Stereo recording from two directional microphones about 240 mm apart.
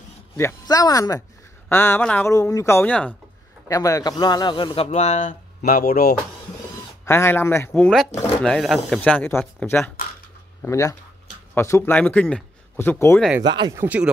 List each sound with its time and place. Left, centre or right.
0.4 s a man's voice: centre; by 6.1 s left
7.1 s a man's voice: centre
13.5 s speech: centre